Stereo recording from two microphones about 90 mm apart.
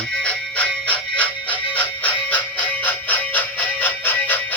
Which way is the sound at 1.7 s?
20° left (ahead or behind).